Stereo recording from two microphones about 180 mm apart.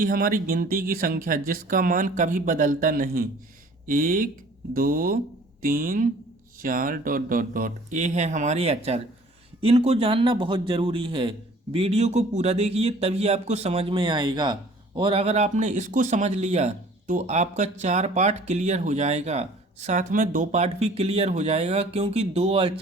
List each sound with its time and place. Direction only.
0.0 s a man's voice: 55° right (ahead or behind); by 22.8 s 35° right (ahead or behind)